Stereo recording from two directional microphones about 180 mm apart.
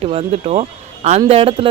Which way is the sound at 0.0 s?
35° right (ahead or behind).